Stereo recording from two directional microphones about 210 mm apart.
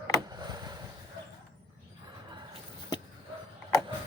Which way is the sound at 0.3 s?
20° right (ahead or behind).